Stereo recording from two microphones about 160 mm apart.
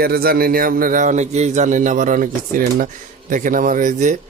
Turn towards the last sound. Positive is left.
turn(degrees=-50)  # may be behind; listen again after turning